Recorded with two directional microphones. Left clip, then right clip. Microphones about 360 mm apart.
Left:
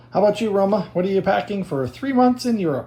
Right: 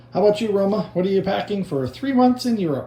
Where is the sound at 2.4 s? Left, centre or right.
Left.